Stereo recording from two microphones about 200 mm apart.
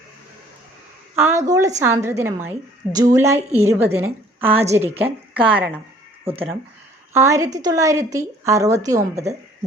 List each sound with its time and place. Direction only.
1.1 s a woman's voice: 15° right (ahead or behind)
7.1 s a woman's voice: 15° right (ahead or behind)